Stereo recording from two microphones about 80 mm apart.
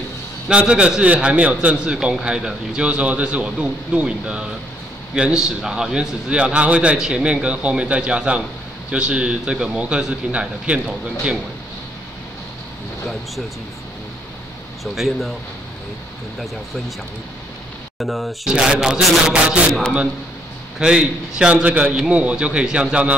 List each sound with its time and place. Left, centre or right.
0.5 s a man's voice: centre
15.0 s speech: centre
17.9 s a man's voice: centre
20.8 s a man's voice: centre